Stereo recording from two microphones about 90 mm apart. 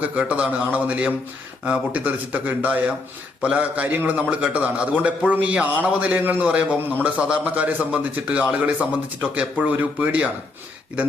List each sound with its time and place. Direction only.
0.0 s a man's voice: 15° right (ahead or behind)